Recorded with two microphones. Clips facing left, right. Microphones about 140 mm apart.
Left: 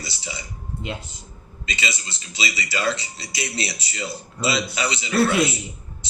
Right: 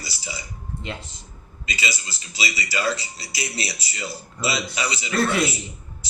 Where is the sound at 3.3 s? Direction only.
25° left (ahead or behind).